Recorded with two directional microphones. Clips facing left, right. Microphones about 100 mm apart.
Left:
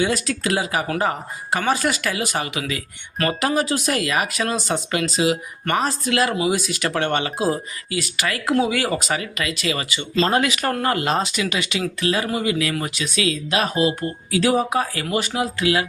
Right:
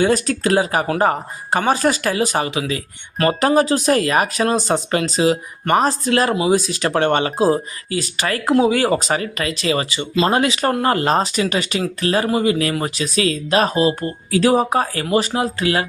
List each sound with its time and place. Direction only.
0.0 s speech: 40° right (ahead or behind)